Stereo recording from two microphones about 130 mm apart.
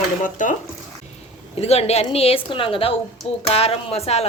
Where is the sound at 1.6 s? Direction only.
55° left (ahead or behind).